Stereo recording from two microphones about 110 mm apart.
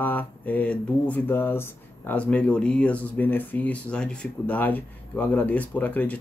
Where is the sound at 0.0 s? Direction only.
15° left (ahead or behind).